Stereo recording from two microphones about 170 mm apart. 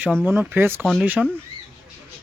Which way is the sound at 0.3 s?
10° right (ahead or behind).